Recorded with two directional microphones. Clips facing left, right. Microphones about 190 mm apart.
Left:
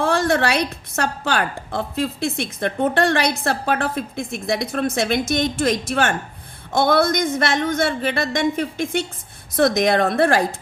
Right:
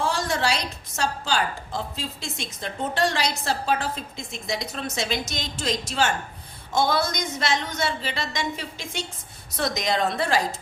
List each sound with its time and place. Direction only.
0.0 s a woman's voice: 60° left (ahead or behind)